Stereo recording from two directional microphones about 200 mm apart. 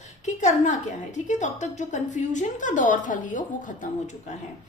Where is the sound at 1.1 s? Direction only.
35° left (ahead or behind).